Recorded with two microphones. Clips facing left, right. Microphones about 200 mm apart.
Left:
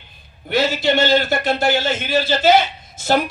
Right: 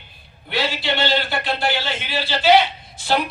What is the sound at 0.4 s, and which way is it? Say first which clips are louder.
A man's voice: left 6 dB; 45° left (ahead or behind).